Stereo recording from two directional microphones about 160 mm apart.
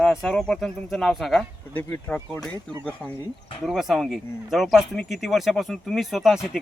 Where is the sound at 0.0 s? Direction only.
5° left (ahead or behind).